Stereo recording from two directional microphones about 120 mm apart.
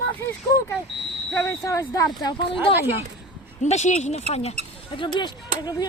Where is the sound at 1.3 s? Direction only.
20° left (ahead or behind).